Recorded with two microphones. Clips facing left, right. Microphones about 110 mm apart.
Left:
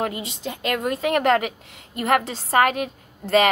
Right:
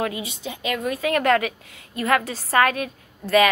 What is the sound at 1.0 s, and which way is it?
A woman's voice, 25° left (ahead or behind).